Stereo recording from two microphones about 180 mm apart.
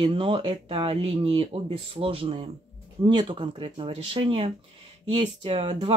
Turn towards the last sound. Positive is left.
turn(degrees=-30)  # may be behind; listen again after turning